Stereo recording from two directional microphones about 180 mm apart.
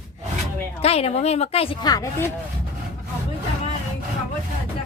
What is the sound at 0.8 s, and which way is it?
A woman's voice, 35° left (ahead or behind).